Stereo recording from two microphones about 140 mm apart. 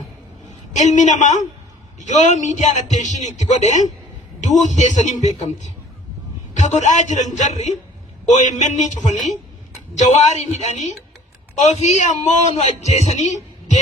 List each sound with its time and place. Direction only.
0.7 s a man's voice: 60° left (ahead or behind)